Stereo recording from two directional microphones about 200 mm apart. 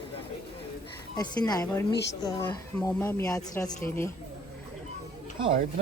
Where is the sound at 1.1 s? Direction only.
20° left (ahead or behind).